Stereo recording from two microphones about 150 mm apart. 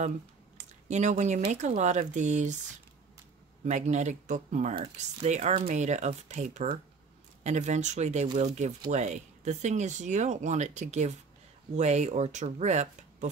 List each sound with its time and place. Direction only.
0.6 s a sound: 50° right (ahead or behind)
1.5 s speech: 50° right (ahead or behind)
3.6 s speech: 50° right (ahead or behind)